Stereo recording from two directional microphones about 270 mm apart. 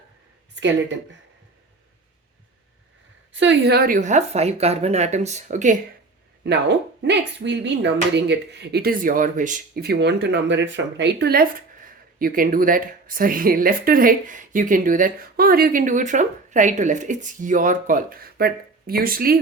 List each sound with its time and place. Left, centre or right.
0.5 s speech: right
3.3 s speech: right
6.4 s speech: right